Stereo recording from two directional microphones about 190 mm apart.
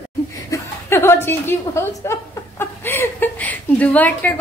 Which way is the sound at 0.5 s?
15° left (ahead or behind).